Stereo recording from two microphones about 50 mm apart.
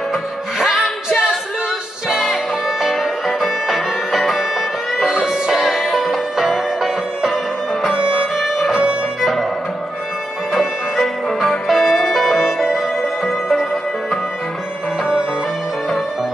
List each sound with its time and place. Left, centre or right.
0.1 s music: centre
7.9 s music: right
8.4 s music: centre
10.5 s music: centre
12.4 s music: centre